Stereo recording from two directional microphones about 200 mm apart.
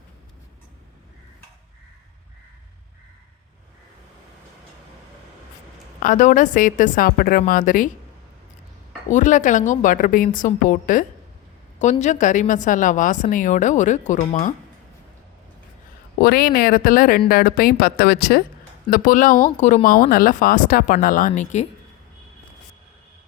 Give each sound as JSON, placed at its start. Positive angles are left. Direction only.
{"t": 6.0, "sound": "a woman's voice", "side_deg": 40}
{"t": 9.0, "sound": "a woman's voice", "side_deg": 40}
{"t": 16.2, "sound": "speech", "side_deg": 45}